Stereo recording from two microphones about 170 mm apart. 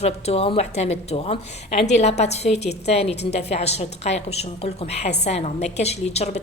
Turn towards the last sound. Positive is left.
turn(degrees=40)  # may be behind; listen again after turning